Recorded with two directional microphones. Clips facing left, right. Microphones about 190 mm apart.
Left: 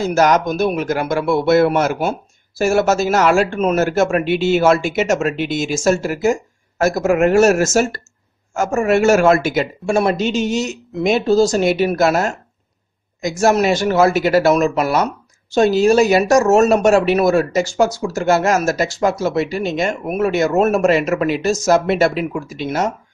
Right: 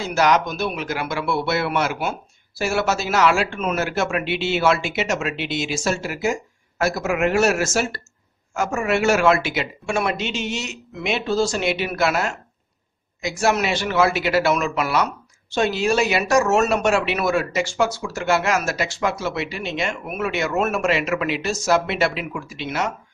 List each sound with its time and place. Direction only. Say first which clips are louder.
0.0 s a woman's voice: left 4 dB; 45° left (ahead or behind)